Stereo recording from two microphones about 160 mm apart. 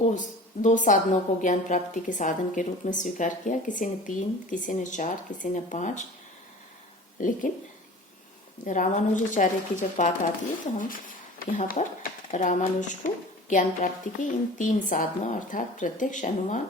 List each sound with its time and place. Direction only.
0.0 s a woman's voice: 50° left (ahead or behind)
7.2 s a woman's voice: 55° left (ahead or behind)
8.6 s a woman's voice: 50° left (ahead or behind)
11.3 s a woman's voice: 60° left (ahead or behind)